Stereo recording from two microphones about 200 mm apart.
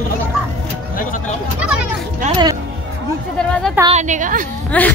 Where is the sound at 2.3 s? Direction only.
20° right (ahead or behind).